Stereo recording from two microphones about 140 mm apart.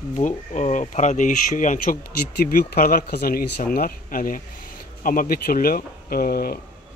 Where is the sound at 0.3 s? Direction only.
55° left (ahead or behind); by 6.6 s 90° left.